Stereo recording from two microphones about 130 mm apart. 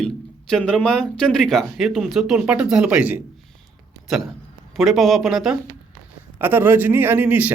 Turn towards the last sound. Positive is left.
turn(degrees=-10)  # may be behind; listen again after turning